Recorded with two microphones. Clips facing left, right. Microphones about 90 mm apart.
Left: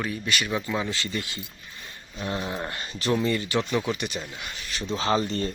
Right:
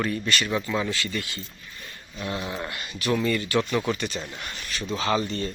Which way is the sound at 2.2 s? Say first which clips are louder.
Left 1 dB; 30° left (ahead or behind).